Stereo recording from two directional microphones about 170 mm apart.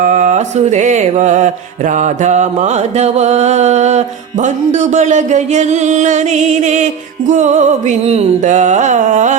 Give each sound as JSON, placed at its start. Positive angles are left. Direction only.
{"t": 0.0, "sound": "mantra", "side_deg": -45}